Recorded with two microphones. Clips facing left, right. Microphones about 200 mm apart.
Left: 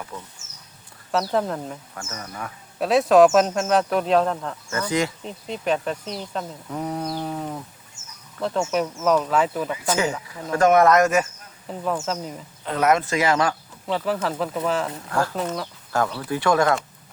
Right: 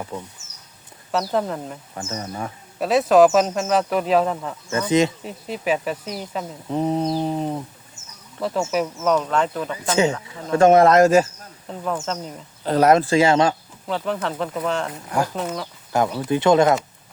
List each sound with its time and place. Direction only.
1.1 s speech: centre (ahead or behind)
2.0 s speech: 25° right (ahead or behind)
2.8 s speech: centre (ahead or behind)
4.7 s speech: 20° right (ahead or behind)
5.2 s speech: 5° right (ahead or behind)
6.7 s mantra: 25° right (ahead or behind)
8.4 s speech: 5° right (ahead or behind)
10.2 s speech: 25° right (ahead or behind)
11.7 s speech: 5° left (ahead or behind)
12.6 s speech: 35° right (ahead or behind)
13.8 s speech: 5° left (ahead or behind)
15.1 s speech: 15° right (ahead or behind)
15.4 s speech: centre (ahead or behind)
15.9 s speech: 20° right (ahead or behind)